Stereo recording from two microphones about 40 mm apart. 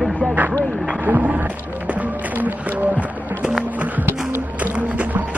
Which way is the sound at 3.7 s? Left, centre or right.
Right.